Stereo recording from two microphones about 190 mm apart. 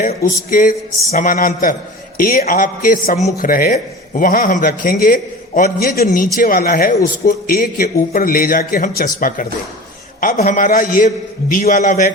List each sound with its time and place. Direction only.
0.0 s a man's voice: 45° left (ahead or behind)
10.2 s a man's voice: 45° left (ahead or behind)